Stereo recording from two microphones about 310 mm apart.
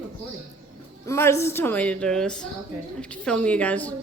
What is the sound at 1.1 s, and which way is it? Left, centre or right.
Speech, centre.